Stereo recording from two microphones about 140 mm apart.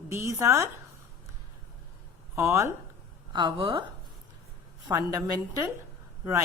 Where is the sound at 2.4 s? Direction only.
20° right (ahead or behind).